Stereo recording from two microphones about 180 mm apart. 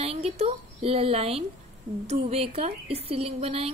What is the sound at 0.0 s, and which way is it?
A woman's voice, 35° right (ahead or behind).